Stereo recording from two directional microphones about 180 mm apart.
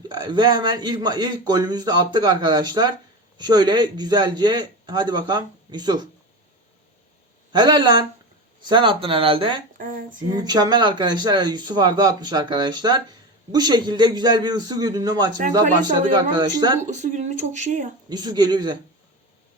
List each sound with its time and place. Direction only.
0.1 s speech: 25° right (ahead or behind)
7.5 s speech: 25° right (ahead or behind)
9.8 s speech: 45° right (ahead or behind)
10.4 s speech: 20° right (ahead or behind)
15.4 s speech: 45° right (ahead or behind)
16.1 s speech: 25° right (ahead or behind)
16.8 s speech: 45° right (ahead or behind)
18.1 s speech: 20° right (ahead or behind)